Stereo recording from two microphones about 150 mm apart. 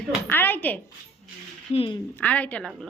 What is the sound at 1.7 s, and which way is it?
Speech, 35° left (ahead or behind).